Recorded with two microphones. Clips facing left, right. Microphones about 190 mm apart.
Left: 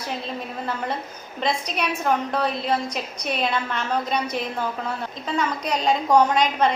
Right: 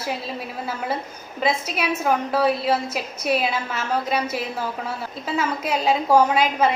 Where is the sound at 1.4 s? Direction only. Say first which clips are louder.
Right 2 dB; 5° right (ahead or behind).